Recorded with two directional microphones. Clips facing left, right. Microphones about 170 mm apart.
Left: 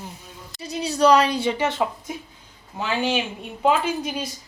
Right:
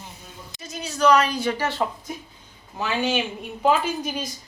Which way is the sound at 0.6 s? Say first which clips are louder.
Left 2 dB; 35° left (ahead or behind).